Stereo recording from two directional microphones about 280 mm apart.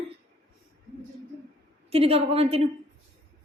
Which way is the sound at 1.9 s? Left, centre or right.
Right.